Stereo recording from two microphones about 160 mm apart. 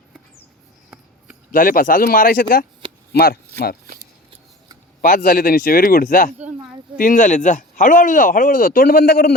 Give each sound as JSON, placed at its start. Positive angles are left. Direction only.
{"t": 1.5, "sound": "speech", "side_deg": 60}
{"t": 3.1, "sound": "speech", "side_deg": 75}
{"t": 4.9, "sound": "speech", "side_deg": 60}